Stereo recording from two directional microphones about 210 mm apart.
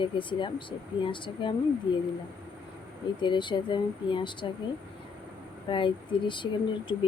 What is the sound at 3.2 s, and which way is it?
Speech, 20° left (ahead or behind).